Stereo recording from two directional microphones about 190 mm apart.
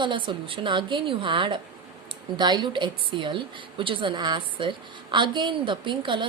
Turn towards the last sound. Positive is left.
turn(degrees=-25)  # may be behind; listen again after turning